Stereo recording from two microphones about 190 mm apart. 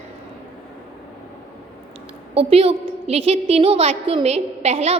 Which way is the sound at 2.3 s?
30° right (ahead or behind).